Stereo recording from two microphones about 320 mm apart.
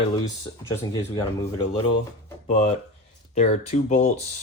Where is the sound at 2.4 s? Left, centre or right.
Centre.